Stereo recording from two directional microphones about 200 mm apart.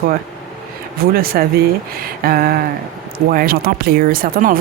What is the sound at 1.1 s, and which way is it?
Speech, 50° right (ahead or behind).